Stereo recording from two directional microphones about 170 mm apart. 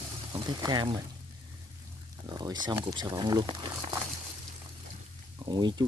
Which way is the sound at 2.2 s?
25° right (ahead or behind).